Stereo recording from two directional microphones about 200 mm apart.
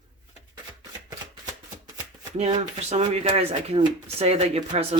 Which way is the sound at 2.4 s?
30° right (ahead or behind).